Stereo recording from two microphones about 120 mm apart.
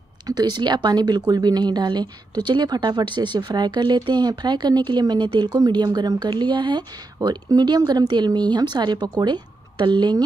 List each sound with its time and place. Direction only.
0.3 s speech: 35° right (ahead or behind)